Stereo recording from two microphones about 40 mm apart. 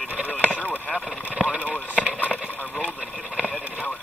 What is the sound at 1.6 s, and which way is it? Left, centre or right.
Vehicle, left.